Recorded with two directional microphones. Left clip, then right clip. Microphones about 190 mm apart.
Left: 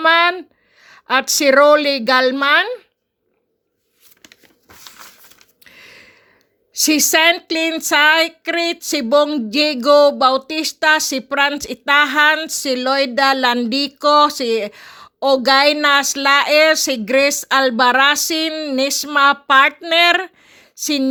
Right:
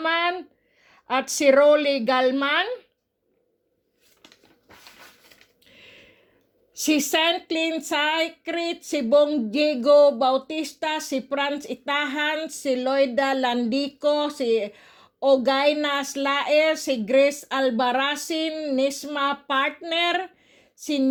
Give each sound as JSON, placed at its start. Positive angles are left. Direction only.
{"t": 0.0, "sound": "a woman's voice", "side_deg": 25}
{"t": 5.6, "sound": "a sound", "side_deg": 30}
{"t": 6.7, "sound": "speech", "side_deg": 30}